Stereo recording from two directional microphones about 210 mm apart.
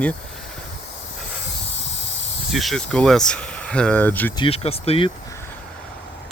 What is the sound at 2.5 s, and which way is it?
Speech, centre (ahead or behind).